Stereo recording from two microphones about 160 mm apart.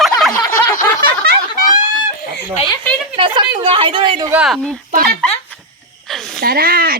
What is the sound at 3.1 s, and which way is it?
A woman's voice, 30° right (ahead or behind).